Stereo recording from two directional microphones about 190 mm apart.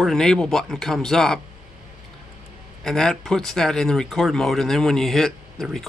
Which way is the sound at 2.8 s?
5° left (ahead or behind).